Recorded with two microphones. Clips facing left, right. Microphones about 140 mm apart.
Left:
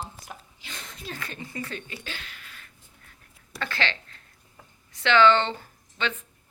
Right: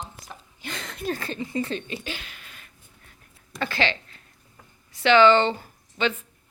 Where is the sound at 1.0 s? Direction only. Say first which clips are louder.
Right 9 dB; 35° right (ahead or behind).